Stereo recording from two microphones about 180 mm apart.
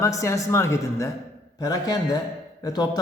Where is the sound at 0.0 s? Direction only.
15° left (ahead or behind).